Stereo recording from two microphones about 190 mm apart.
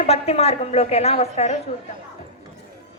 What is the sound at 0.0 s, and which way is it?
A woman's voice, 35° left (ahead or behind).